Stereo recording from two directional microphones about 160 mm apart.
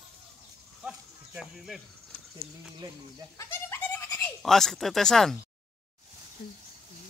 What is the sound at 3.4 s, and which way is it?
Goat, 15° left (ahead or behind).